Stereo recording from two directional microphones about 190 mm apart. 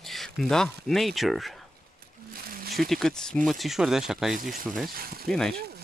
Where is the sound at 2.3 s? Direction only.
50° right (ahead or behind).